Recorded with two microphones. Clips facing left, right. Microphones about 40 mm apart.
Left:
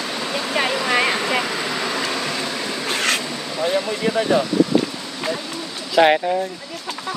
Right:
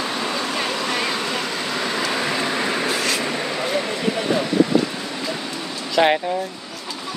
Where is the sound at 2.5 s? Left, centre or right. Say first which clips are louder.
Right 4 dB; right.